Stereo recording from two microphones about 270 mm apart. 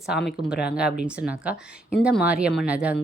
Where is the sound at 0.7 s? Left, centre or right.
Centre.